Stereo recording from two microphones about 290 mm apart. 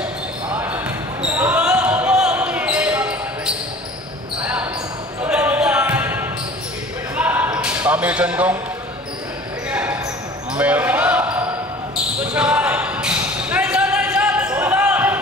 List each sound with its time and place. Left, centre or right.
0.5 s basketball bounce: centre
9.7 s basketball bounce: centre